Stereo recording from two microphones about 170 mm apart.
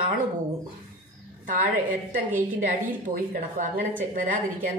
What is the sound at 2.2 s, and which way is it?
Speech, 10° right (ahead or behind).